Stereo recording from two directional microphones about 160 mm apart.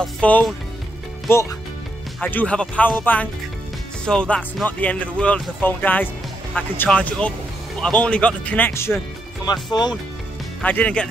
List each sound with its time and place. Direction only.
0.0 s speech: 5° left (ahead or behind)
1.3 s speech: 15° left (ahead or behind)
9.5 s speech: 25° left (ahead or behind)
10.6 s speech: 10° left (ahead or behind)